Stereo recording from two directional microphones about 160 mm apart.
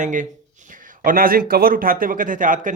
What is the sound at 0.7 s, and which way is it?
Speech, 60° right (ahead or behind).